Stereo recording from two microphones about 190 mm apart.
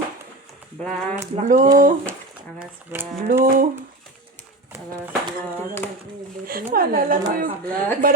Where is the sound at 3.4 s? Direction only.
45° right (ahead or behind).